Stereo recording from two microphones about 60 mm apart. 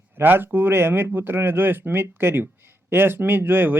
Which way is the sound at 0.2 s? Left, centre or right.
Right.